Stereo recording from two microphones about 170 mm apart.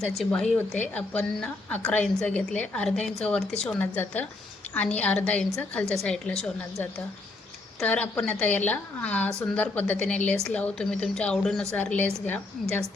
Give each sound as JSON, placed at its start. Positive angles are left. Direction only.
{"t": 0.0, "sound": "a woman's voice", "side_deg": 0}
{"t": 7.8, "sound": "a woman's voice", "side_deg": 5}